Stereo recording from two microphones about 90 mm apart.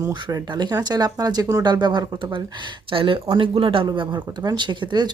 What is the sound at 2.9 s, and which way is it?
Speech, 80° right.